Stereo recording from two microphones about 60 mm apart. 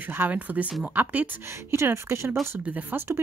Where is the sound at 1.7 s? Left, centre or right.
Right.